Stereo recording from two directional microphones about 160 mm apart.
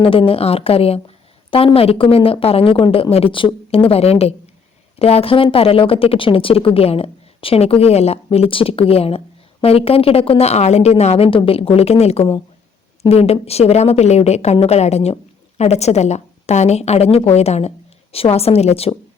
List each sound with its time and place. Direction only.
0.0 s a woman's voice: 35° left (ahead or behind)